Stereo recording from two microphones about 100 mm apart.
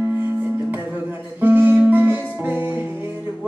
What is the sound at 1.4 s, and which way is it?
Music, 20° right (ahead or behind).